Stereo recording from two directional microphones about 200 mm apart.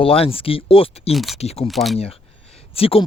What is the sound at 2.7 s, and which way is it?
Speech, 30° left (ahead or behind).